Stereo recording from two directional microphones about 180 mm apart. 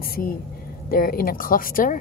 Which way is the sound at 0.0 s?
55° left (ahead or behind).